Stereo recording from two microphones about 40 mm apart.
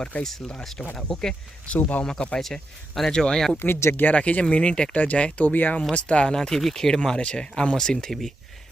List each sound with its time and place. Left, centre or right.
0.2 s speech: centre
1.3 s speech: left
2.0 s speech: left
2.4 s speech: centre
3.1 s speech: centre
3.6 s speech: left
4.1 s speech: left
6.3 s speech: centre
8.0 s speech: centre